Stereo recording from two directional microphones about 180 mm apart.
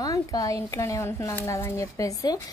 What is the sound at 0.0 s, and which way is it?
Speech, 20° left (ahead or behind).